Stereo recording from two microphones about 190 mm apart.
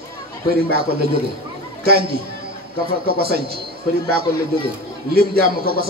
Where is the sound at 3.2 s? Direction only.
55° right (ahead or behind).